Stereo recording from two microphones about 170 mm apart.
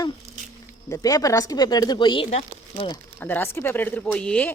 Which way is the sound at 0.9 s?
20° left (ahead or behind).